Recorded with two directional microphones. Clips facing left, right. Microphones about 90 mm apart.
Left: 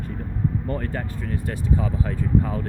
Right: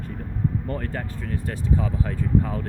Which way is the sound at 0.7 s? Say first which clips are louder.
Left 2 dB; 10° left (ahead or behind).